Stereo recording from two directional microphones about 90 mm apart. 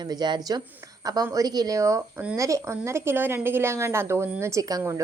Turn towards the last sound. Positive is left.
turn(degrees=-40)  # may be behind; listen again after turning